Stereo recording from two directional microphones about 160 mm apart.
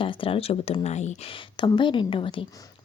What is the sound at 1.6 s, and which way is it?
Speech, 30° left (ahead or behind).